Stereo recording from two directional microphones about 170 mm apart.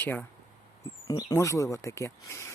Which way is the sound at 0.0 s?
10° left (ahead or behind).